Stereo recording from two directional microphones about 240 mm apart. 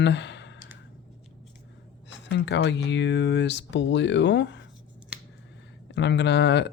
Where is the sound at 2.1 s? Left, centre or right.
Left.